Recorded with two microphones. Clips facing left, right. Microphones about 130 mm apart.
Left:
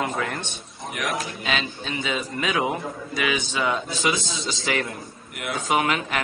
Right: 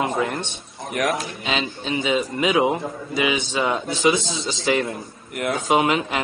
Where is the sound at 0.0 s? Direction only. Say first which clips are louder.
Right 4 dB; 25° right (ahead or behind).